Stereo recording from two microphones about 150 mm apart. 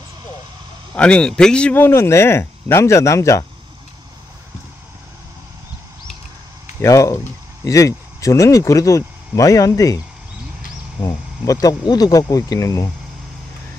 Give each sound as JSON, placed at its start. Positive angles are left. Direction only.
{"t": 0.9, "sound": "a man's voice", "side_deg": 5}
{"t": 6.8, "sound": "speech", "side_deg": 20}